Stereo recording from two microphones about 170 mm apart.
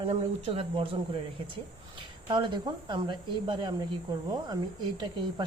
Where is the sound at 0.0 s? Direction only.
35° right (ahead or behind).